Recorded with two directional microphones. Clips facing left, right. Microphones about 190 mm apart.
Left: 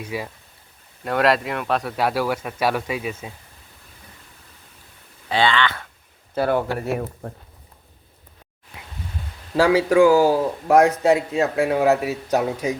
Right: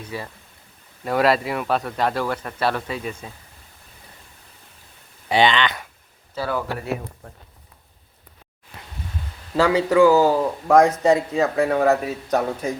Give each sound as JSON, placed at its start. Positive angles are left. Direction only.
{"t": 0.0, "sound": "a man's voice", "side_deg": 10}
{"t": 1.0, "sound": "a man's voice", "side_deg": 0}
{"t": 5.3, "sound": "speech", "side_deg": -20}
{"t": 6.3, "sound": "speech", "side_deg": 55}
{"t": 9.6, "sound": "a man's voice", "side_deg": 15}